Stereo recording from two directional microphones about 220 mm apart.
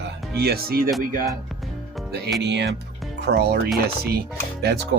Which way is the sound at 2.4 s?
50° right (ahead or behind).